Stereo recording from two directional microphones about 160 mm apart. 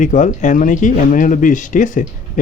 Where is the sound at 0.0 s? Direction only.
50° left (ahead or behind).